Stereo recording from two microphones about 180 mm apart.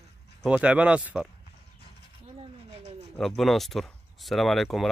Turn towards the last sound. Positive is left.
turn(degrees=0)  # may be behind; listen again after turning